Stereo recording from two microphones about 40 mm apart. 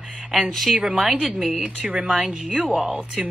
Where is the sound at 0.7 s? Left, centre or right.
Centre.